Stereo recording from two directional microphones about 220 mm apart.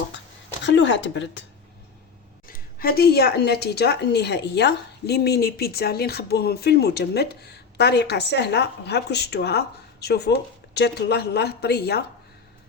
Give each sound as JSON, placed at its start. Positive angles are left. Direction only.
{"t": 0.6, "sound": "speech", "side_deg": 55}
{"t": 2.5, "sound": "a woman's voice", "side_deg": 40}